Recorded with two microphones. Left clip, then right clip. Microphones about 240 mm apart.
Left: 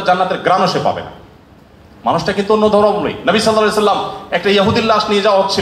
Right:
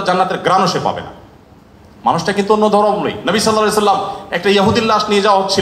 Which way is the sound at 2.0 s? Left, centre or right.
Right.